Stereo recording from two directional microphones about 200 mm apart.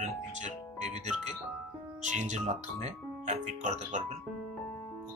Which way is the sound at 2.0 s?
35° right (ahead or behind).